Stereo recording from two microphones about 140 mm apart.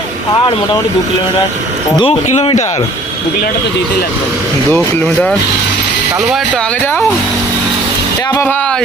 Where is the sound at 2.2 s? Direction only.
50° left (ahead or behind).